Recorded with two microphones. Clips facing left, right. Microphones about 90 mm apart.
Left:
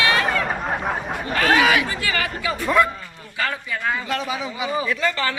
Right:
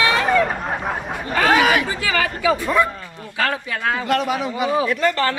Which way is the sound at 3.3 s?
75° right (ahead or behind).